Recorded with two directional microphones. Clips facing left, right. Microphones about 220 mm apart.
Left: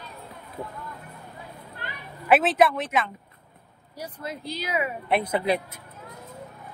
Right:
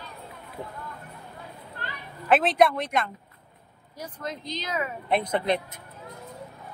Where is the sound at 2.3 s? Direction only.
5° left (ahead or behind).